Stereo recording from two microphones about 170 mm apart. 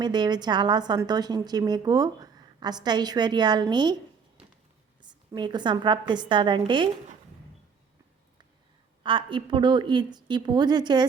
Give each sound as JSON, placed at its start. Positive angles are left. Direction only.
{"t": 0.0, "sound": "a woman's voice", "side_deg": -25}
{"t": 5.0, "sound": "a woman's voice", "side_deg": -25}
{"t": 9.0, "sound": "a woman's voice", "side_deg": -30}